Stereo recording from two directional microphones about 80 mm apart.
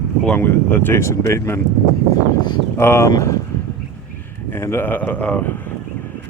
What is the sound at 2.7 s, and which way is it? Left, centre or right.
Speech, left.